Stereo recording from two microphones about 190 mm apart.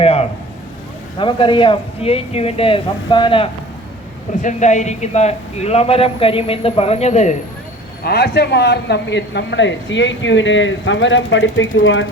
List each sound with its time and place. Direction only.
0.0 s a man's voice: 30° left (ahead or behind)
4.4 s a man's voice: 40° left (ahead or behind)
8.0 s speech: 60° left (ahead or behind); by 12.0 s 90° left